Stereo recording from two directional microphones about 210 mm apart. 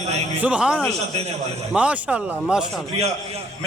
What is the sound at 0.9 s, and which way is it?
Speech, 30° right (ahead or behind).